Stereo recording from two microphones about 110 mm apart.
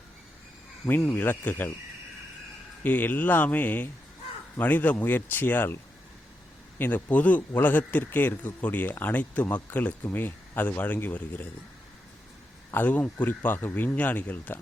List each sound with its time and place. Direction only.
0.9 s speech: 15° left (ahead or behind)
2.8 s speech: 15° left (ahead or behind)
6.7 s speech: 15° left (ahead or behind)
12.7 s speech: 15° left (ahead or behind)